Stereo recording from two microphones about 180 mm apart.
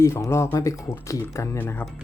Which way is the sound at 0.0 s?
15° left (ahead or behind).